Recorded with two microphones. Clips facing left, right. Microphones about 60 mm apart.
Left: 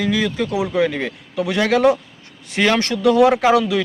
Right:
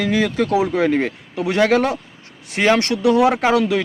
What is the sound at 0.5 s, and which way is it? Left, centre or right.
Speech, right.